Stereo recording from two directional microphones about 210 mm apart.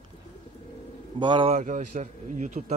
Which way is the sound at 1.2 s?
20° right (ahead or behind).